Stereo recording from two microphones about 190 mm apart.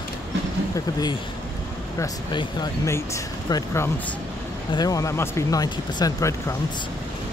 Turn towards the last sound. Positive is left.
turn(degrees=15)  # may be behind; listen again after turning